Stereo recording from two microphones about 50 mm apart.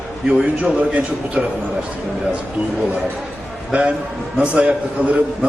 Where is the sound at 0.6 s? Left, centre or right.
Right.